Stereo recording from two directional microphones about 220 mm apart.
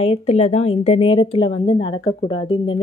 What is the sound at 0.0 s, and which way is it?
Speech, 30° left (ahead or behind).